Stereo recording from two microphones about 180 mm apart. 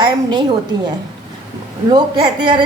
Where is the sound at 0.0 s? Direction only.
25° right (ahead or behind).